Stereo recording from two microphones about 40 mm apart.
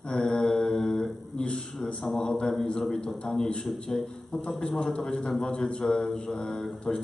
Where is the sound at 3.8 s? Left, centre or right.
Centre.